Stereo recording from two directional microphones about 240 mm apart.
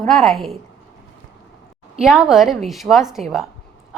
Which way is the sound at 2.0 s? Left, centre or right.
Centre.